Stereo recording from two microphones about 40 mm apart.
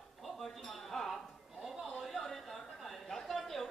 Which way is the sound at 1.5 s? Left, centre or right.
Centre.